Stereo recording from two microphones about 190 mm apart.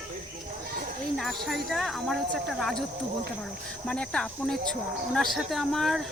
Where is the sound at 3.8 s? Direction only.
5° left (ahead or behind).